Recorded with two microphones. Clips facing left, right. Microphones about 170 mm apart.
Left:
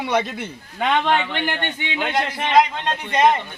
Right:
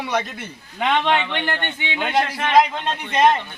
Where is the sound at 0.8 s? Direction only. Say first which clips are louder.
Even; 5° left (ahead or behind).